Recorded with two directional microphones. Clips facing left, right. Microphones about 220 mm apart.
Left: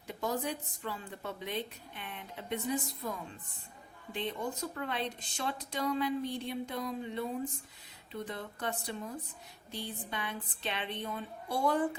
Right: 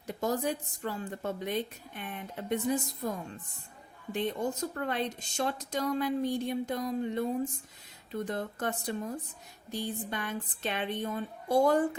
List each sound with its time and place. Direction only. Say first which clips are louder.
0.1 s a woman's voice: right 4 dB; 45° right (ahead or behind)